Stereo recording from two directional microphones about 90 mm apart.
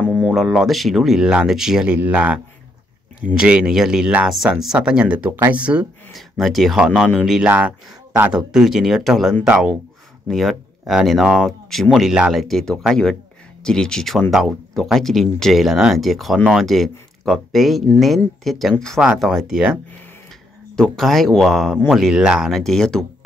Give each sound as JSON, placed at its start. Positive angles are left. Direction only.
{"t": 0.0, "sound": "a sound", "side_deg": 15}
{"t": 0.3, "sound": "speech", "side_deg": 0}
{"t": 6.1, "sound": "speech", "side_deg": 0}
{"t": 20.7, "sound": "speech", "side_deg": 5}